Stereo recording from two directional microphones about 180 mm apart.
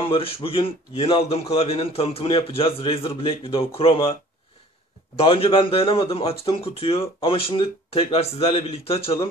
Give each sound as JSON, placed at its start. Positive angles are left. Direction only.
{"t": 0.0, "sound": "a man's voice", "side_deg": 30}